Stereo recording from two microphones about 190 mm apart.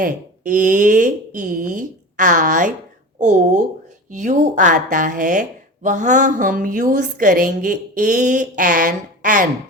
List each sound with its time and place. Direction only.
0.0 s a woman's voice: 45° right (ahead or behind)